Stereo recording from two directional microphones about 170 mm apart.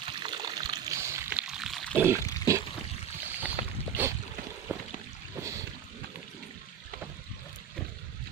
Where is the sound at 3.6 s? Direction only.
50° right (ahead or behind).